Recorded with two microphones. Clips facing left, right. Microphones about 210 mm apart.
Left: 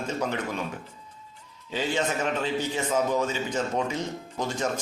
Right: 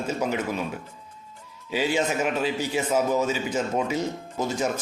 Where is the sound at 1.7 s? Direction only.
10° right (ahead or behind).